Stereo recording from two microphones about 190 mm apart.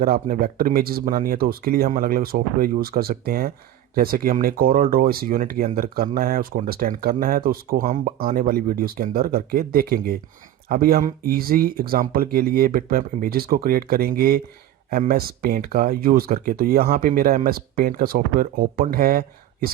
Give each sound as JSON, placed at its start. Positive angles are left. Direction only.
{"t": 0.0, "sound": "speech", "side_deg": -50}